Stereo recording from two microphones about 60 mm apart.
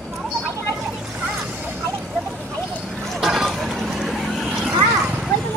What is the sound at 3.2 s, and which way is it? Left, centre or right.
Vehicle, centre.